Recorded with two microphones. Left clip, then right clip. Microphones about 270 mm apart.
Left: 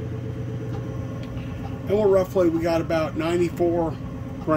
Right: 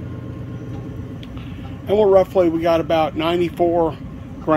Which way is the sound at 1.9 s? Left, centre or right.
Centre.